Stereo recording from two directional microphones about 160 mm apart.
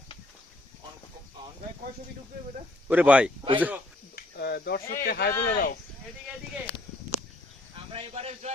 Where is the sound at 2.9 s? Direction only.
10° right (ahead or behind).